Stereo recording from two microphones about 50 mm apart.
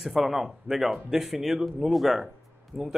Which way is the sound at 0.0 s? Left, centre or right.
Centre.